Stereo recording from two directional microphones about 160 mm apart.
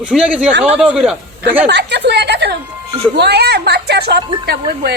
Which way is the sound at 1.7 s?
90° right.